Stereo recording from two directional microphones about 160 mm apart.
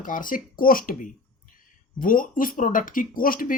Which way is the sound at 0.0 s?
60° left (ahead or behind).